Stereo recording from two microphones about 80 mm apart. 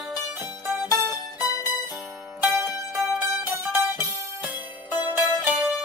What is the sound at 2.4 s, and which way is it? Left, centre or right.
Music, right.